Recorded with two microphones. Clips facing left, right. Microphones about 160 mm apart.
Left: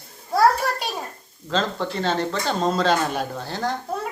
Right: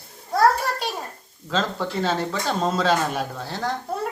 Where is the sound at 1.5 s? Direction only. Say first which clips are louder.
Left 1 dB; 5° right (ahead or behind).